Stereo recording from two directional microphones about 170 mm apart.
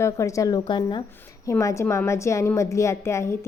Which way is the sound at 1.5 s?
15° left (ahead or behind).